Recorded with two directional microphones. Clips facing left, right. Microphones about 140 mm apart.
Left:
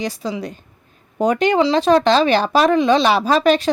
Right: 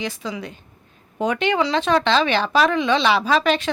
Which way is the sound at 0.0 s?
35° left (ahead or behind).